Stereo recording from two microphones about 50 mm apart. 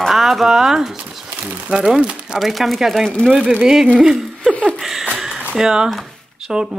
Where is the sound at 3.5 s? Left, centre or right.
Centre.